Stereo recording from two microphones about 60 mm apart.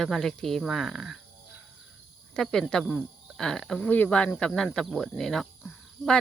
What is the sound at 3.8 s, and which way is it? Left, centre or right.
Speech, left.